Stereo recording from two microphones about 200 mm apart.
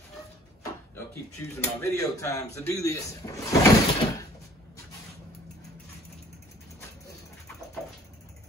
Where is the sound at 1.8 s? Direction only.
15° left (ahead or behind).